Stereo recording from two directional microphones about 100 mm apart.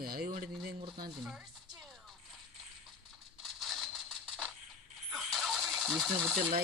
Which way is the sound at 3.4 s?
Centre (ahead or behind).